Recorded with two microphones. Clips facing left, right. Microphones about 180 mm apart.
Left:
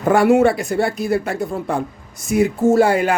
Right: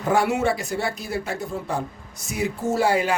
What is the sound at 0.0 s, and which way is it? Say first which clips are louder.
Speech: left 8 dB; 55° left (ahead or behind).